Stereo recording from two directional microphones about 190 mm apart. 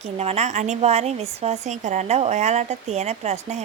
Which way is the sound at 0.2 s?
35° right (ahead or behind).